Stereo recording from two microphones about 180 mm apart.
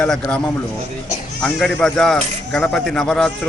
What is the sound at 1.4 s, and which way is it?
Speech, 5° left (ahead or behind).